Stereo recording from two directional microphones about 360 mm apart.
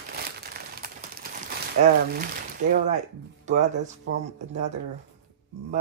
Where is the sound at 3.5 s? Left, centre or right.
Centre.